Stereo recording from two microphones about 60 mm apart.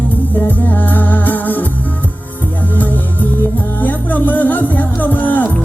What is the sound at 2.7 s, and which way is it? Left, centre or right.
Music, left.